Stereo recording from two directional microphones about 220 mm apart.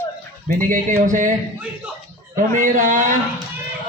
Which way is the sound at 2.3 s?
35° right (ahead or behind).